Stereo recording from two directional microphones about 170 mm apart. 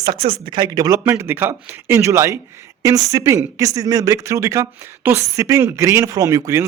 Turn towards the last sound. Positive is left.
turn(degrees=-20)  # may be behind; listen again after turning